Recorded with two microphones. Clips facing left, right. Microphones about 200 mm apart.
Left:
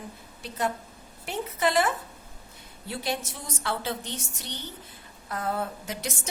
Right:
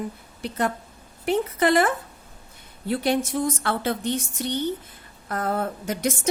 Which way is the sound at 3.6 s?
55° right (ahead or behind).